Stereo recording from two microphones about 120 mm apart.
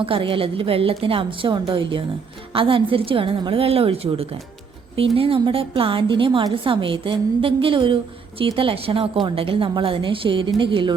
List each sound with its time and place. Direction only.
0.0 s a woman's voice: 50° right (ahead or behind)